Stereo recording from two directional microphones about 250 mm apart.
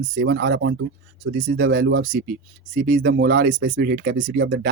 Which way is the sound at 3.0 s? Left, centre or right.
Right.